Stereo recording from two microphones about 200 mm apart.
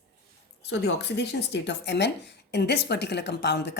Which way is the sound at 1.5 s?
60° left (ahead or behind).